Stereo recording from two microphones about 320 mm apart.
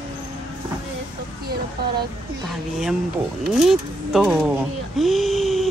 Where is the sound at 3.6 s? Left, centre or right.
Centre.